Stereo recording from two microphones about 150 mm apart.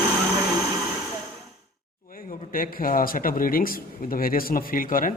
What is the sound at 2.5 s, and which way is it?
Speech, 70° left (ahead or behind).